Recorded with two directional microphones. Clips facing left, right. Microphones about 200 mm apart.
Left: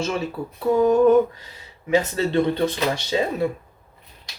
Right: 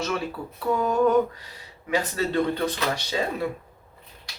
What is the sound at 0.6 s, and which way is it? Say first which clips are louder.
Speech: left 6 dB; 20° left (ahead or behind).